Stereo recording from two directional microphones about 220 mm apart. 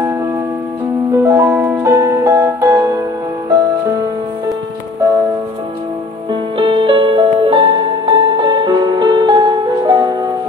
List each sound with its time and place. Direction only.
1.1 s music: 15° right (ahead or behind)
6.6 s music: 25° right (ahead or behind)